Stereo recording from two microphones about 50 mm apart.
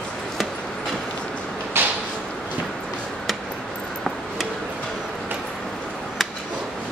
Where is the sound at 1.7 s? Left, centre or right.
Right.